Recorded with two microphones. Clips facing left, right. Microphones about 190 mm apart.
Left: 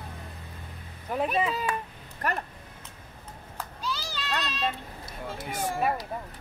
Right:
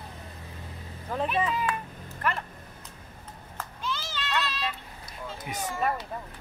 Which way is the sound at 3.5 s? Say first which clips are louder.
Even; 10° left (ahead or behind).